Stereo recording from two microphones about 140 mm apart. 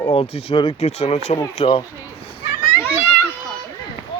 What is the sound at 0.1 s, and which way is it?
Speech, 45° left (ahead or behind).